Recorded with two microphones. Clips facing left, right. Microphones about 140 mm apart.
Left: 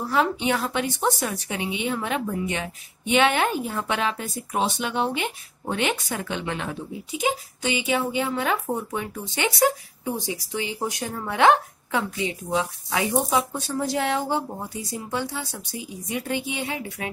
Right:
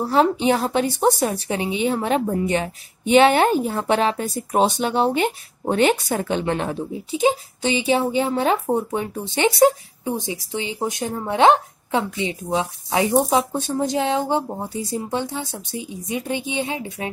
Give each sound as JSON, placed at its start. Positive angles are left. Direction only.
{"t": 0.0, "sound": "a woman's voice", "side_deg": -35}